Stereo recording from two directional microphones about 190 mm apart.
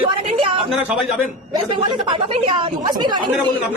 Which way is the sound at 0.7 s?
10° right (ahead or behind).